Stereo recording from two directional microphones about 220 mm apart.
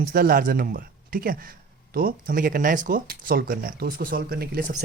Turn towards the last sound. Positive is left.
turn(degrees=-40)  # may be behind; listen again after turning